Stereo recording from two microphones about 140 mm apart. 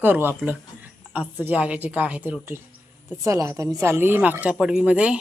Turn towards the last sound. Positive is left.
turn(degrees=-10)  # may be behind; listen again after turning